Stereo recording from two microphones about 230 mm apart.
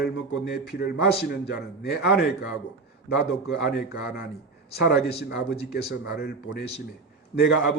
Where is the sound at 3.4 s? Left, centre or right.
Left.